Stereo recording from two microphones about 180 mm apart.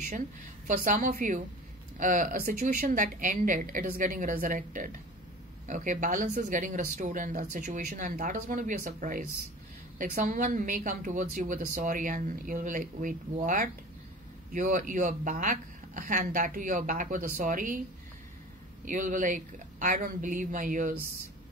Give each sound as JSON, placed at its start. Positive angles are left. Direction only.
{"t": 0.7, "sound": "speech", "side_deg": -45}
{"t": 18.9, "sound": "speech", "side_deg": -45}